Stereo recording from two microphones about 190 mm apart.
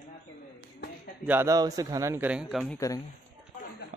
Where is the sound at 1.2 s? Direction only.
15° right (ahead or behind).